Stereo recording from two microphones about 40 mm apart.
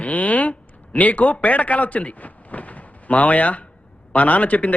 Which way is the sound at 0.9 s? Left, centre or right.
Left.